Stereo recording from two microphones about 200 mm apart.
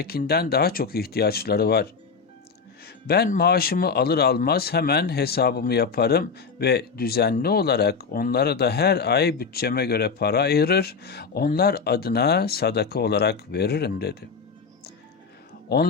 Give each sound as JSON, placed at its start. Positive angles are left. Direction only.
{"t": 0.0, "sound": "speech", "side_deg": 50}
{"t": 3.1, "sound": "speech", "side_deg": 50}